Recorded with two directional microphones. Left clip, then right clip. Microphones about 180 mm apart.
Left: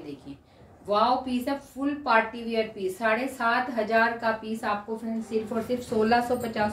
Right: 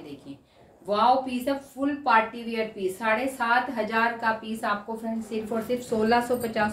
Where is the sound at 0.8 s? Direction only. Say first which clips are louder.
Right 2 dB; 20° right (ahead or behind).